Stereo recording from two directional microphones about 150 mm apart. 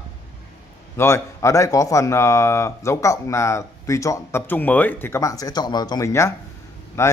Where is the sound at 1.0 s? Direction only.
15° left (ahead or behind).